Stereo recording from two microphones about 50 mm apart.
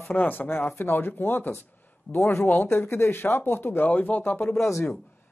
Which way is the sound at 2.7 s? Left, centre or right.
Left.